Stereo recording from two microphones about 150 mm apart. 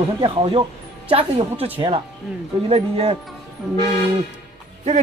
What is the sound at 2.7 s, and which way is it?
Speech, 40° right (ahead or behind).